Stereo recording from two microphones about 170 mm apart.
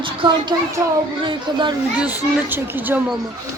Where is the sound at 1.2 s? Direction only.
30° right (ahead or behind).